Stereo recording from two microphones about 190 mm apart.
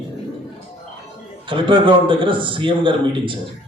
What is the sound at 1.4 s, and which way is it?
A man's voice, 25° right (ahead or behind).